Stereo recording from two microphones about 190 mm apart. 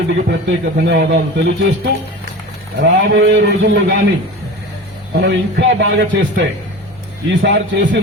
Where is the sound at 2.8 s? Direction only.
65° right (ahead or behind).